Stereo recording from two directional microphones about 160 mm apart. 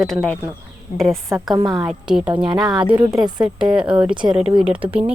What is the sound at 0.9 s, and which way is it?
Speech, 55° left (ahead or behind).